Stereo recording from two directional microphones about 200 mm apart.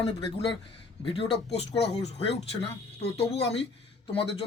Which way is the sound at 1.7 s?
60° left (ahead or behind).